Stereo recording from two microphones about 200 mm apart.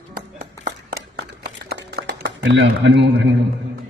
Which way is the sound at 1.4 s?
60° right (ahead or behind).